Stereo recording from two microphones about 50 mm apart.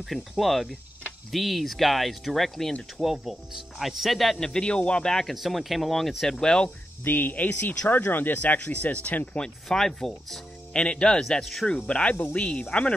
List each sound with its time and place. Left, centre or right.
0.0 s speech: centre
4.5 s a man's voice: centre
5.3 s speech: centre
6.4 s a man's voice: centre
7.1 s speech: left
9.7 s speech: centre
10.7 s a man's voice: centre
11.9 s speech: left
12.7 s speech: centre